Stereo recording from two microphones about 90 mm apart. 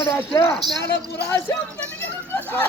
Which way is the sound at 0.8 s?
25° left (ahead or behind).